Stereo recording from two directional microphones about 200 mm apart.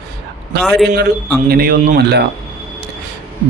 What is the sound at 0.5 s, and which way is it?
A man's voice, 55° right (ahead or behind).